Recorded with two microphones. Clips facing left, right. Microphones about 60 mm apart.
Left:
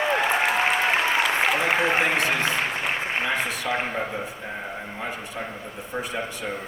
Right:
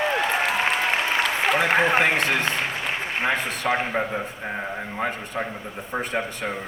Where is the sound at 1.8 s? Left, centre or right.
Right.